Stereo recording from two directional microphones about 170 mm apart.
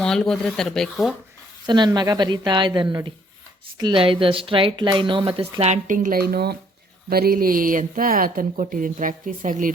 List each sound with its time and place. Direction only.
0.0 s speech: 5° left (ahead or behind)
1.6 s a woman's voice: 25° right (ahead or behind); by 9.7 s 50° right (ahead or behind)